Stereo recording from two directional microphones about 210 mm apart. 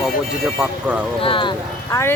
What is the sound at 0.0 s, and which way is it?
Speech, 5° right (ahead or behind).